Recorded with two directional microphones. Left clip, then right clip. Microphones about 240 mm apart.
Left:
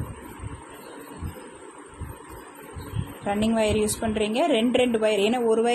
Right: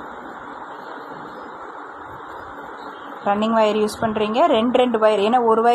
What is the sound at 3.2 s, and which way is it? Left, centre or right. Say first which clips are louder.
A woman's voice: right 7 dB; centre.